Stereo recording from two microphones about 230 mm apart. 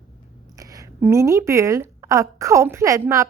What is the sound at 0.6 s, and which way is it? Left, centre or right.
A woman's voice, centre.